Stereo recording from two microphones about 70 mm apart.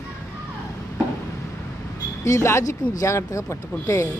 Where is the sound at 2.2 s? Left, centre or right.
Left.